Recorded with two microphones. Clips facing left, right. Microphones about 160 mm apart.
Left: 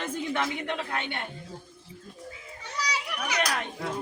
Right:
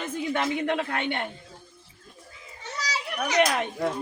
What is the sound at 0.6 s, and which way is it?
Speech, 50° right (ahead or behind).